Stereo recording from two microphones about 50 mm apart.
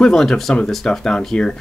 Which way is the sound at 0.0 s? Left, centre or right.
Centre.